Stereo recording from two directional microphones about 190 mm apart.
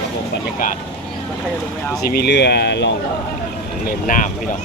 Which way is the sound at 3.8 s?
50° left (ahead or behind).